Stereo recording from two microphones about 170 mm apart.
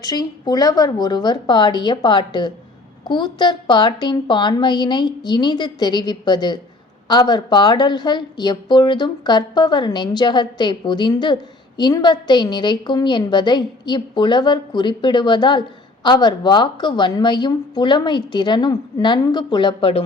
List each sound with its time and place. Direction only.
0.0 s a woman's voice: 25° left (ahead or behind)